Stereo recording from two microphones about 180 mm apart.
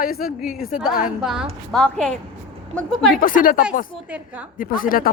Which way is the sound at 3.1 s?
50° left (ahead or behind).